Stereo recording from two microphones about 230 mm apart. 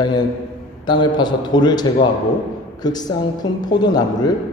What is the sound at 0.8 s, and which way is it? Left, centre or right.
A man's voice, centre.